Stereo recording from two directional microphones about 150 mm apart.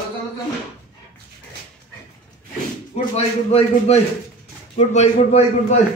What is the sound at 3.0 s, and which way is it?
A man's voice, 40° left (ahead or behind).